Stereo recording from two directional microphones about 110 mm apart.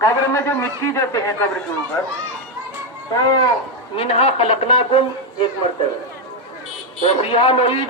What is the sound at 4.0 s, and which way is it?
Speech, 65° left (ahead or behind).